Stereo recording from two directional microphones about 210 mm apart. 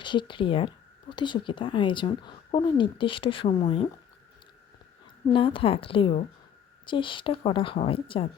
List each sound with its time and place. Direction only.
0.0 s speech: 20° left (ahead or behind)
5.3 s speech: 25° left (ahead or behind)